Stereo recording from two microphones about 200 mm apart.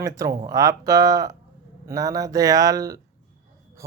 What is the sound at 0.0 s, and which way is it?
Speech, 15° right (ahead or behind).